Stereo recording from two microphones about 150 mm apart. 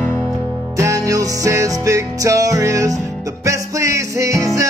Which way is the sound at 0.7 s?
20° right (ahead or behind).